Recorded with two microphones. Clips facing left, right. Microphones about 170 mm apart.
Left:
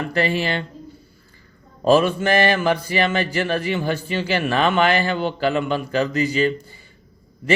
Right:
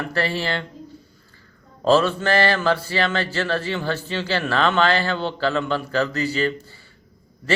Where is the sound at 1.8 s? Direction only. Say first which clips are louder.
Left 2 dB; 15° left (ahead or behind).